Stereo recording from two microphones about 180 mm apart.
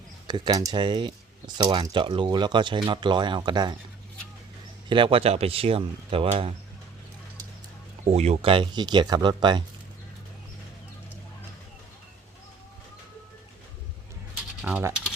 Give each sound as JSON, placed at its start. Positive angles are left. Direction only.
{"t": 0.3, "sound": "speech", "side_deg": -25}
{"t": 4.9, "sound": "speech", "side_deg": -30}
{"t": 8.0, "sound": "speech", "side_deg": -40}
{"t": 14.6, "sound": "speech", "side_deg": -10}